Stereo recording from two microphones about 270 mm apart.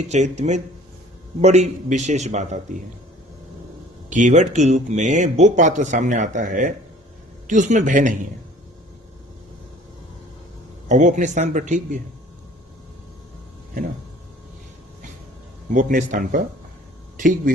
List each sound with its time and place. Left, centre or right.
0.1 s speech: right
4.1 s speech: right
10.8 s speech: right
15.7 s speech: right